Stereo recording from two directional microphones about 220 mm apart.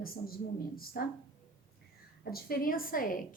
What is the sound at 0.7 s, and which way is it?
Speech, 45° left (ahead or behind).